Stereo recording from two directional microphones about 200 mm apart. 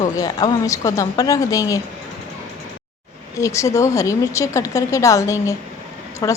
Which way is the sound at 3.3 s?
15° left (ahead or behind).